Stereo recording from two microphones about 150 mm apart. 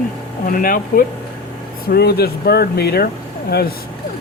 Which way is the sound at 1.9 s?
90° left.